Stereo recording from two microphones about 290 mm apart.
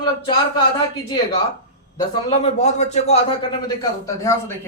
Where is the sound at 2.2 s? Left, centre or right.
Left.